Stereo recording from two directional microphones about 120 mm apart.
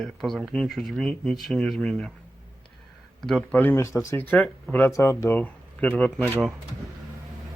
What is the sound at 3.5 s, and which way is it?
Speech, 15° left (ahead or behind).